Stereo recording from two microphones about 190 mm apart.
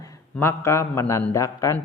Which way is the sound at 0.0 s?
15° left (ahead or behind).